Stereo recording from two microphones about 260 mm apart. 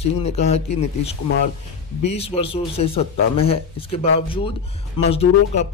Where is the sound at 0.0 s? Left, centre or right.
Left.